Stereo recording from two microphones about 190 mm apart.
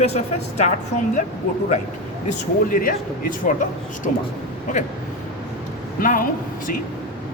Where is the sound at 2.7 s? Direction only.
50° left (ahead or behind).